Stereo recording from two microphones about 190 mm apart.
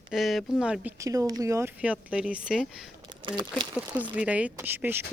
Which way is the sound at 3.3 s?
25° right (ahead or behind).